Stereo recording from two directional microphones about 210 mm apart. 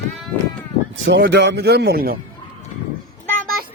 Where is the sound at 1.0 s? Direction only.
60° right (ahead or behind).